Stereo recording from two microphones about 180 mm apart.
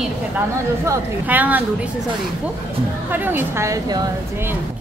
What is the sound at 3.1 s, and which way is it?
A woman's voice, 10° right (ahead or behind).